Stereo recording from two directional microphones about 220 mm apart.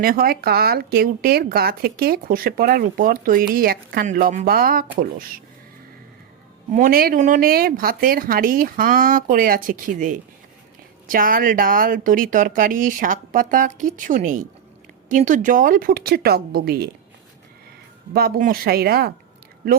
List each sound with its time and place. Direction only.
0.0 s a woman's voice: 40° right (ahead or behind)
6.7 s speech: 35° right (ahead or behind)
11.1 s a woman's voice: 40° right (ahead or behind)
18.1 s a woman's voice: 45° right (ahead or behind)